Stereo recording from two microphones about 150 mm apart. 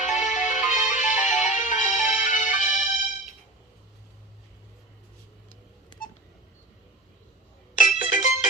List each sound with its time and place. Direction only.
0.0 s music: 55° left (ahead or behind)
7.8 s music: 65° left (ahead or behind)